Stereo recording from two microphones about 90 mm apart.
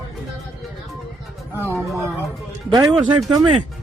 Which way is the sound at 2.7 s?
55° right (ahead or behind).